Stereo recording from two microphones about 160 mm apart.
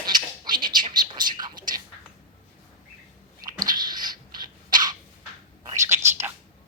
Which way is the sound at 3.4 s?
25° right (ahead or behind).